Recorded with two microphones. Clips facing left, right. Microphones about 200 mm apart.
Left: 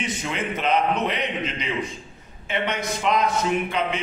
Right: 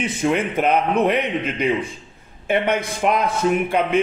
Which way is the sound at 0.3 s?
55° right (ahead or behind).